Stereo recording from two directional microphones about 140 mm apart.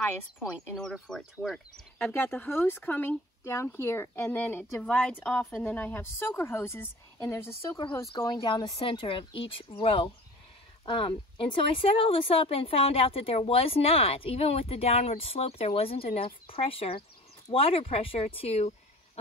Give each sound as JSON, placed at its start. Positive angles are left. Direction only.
{"t": 0.7, "sound": "speech", "side_deg": 5}
{"t": 2.1, "sound": "a woman's voice", "side_deg": 15}